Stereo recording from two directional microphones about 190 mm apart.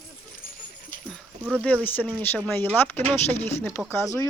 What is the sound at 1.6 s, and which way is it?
Speech, 5° left (ahead or behind).